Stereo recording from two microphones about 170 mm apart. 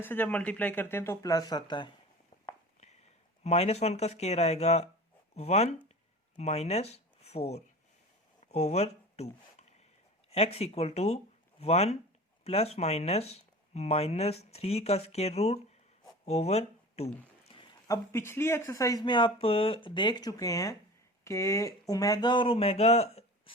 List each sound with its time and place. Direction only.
0.0 s speech: 10° left (ahead or behind)
2.8 s speech: 40° left (ahead or behind)
16.2 s a sound: 40° left (ahead or behind)
17.8 s speech: 15° left (ahead or behind); by 23.2 s 35° left (ahead or behind)